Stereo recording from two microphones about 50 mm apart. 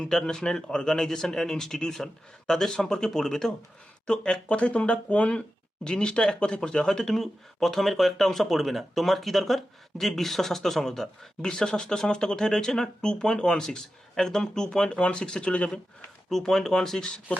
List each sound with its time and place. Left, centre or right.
0.0 s speech: centre
16.3 s speech: centre